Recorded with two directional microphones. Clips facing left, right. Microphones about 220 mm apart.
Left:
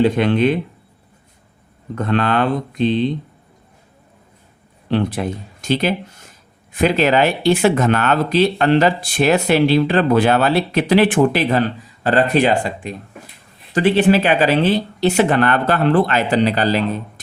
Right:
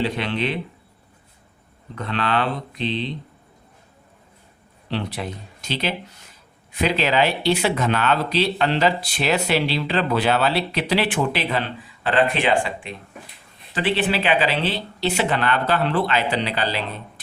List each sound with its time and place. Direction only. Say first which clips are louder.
0.0 s speech: left 9 dB; 50° left (ahead or behind)
2.0 s speech: left 6 dB; 50° left (ahead or behind)
4.9 s speech: left 8 dB; 50° left (ahead or behind)